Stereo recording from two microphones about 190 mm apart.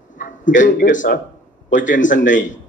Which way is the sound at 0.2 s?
45° left (ahead or behind).